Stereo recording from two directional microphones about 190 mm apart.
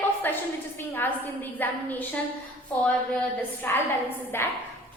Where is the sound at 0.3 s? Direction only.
10° left (ahead or behind).